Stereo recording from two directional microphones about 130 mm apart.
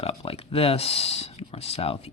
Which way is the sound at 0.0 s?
45° left (ahead or behind).